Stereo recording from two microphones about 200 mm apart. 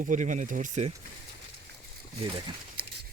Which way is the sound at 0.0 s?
40° right (ahead or behind).